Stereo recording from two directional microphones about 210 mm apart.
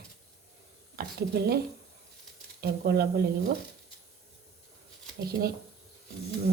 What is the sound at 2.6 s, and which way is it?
Speech, 50° right (ahead or behind).